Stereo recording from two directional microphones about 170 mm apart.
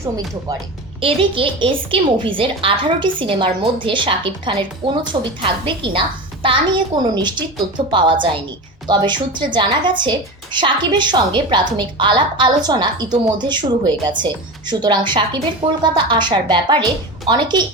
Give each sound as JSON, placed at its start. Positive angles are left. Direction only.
{"t": 1.0, "sound": "a woman's voice", "side_deg": -30}